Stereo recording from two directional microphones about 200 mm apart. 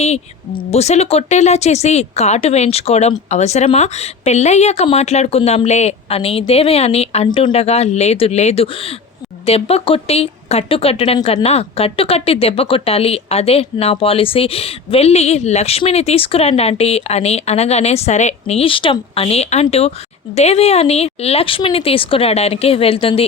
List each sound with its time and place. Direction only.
0.0 s a woman's voice: 30° left (ahead or behind)